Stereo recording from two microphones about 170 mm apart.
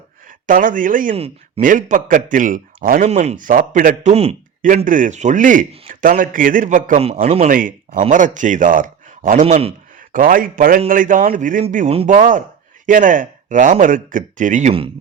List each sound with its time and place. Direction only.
0.3 s a man's voice: 50° right (ahead or behind)
1.1 s speech: 35° right (ahead or behind)
1.6 s a man's voice: 50° right (ahead or behind)
3.1 s a man's voice: 40° right (ahead or behind)
4.1 s speech: 35° right (ahead or behind)
4.9 s a man's voice: 50° right (ahead or behind)
10.1 s a man's voice: 55° right (ahead or behind)